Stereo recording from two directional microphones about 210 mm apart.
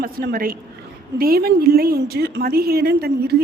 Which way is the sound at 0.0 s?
45° right (ahead or behind).